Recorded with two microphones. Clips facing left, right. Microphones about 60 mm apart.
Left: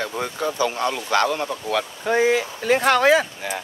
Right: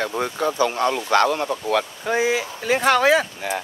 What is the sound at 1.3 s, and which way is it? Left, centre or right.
Speech, right.